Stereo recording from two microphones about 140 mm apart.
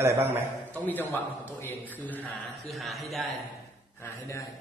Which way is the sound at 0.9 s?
15° left (ahead or behind).